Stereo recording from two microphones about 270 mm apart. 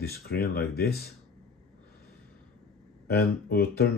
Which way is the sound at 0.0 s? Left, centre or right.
Left.